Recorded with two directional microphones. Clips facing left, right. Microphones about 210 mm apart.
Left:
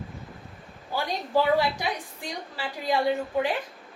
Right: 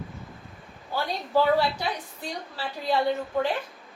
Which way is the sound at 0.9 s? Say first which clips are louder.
Right 1 dB; 15° left (ahead or behind).